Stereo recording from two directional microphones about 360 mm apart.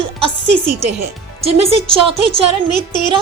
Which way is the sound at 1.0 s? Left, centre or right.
Centre.